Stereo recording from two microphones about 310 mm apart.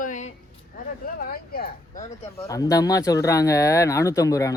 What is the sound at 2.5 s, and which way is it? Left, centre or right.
Speech, centre.